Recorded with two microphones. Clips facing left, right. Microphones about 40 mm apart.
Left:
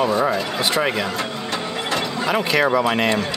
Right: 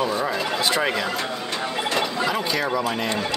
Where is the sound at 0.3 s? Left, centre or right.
Centre.